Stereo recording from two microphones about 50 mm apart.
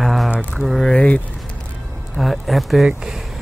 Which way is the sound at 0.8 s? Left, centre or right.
Left.